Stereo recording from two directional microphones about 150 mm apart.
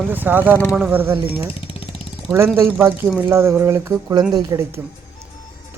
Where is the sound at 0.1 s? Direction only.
15° right (ahead or behind).